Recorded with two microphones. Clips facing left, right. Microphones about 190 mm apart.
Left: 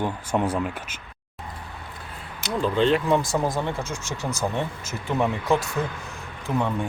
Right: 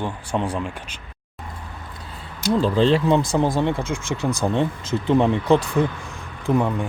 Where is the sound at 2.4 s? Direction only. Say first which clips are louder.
Right 4 dB; 35° right (ahead or behind).